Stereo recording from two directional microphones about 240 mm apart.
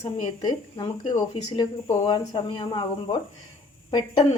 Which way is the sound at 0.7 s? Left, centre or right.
Centre.